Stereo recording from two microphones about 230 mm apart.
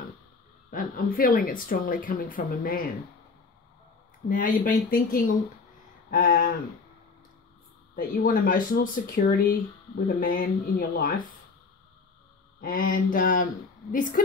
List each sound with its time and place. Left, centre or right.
0.7 s speech: left
4.3 s speech: left
7.9 s speech: left
12.5 s speech: left